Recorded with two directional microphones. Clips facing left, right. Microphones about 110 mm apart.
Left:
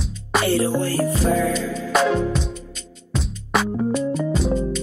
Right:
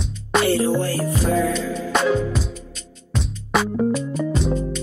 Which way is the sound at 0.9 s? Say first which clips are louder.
Left 2 dB; 20° left (ahead or behind).